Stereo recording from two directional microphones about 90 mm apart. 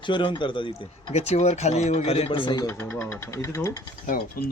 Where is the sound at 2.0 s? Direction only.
80° left.